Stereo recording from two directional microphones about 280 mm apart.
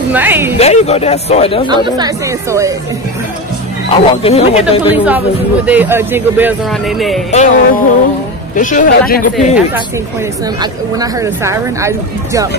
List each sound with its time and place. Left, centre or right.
0.1 s speech: centre
0.6 s speech: left
2.0 s speech: centre
3.9 s speech: left
4.8 s speech: centre
7.2 s speech: left
10.6 s speech: centre